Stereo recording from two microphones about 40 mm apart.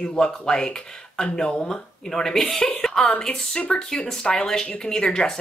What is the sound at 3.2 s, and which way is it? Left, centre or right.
Speech, left.